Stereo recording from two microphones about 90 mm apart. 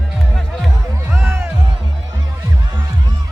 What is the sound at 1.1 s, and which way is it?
Music, 30° right (ahead or behind).